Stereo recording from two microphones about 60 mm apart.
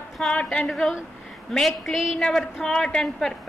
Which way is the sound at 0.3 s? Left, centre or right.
Centre.